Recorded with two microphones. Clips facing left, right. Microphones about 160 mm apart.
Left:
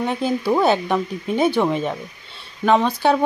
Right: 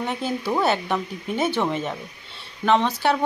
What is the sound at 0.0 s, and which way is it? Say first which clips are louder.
A woman's voice: left 5 dB; 15° left (ahead or behind).